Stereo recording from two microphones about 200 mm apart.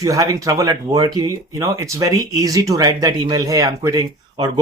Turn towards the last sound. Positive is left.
turn(degrees=-15)  # may be behind; listen again after turning